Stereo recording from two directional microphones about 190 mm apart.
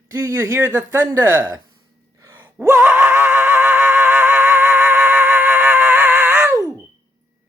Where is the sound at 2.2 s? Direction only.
10° right (ahead or behind).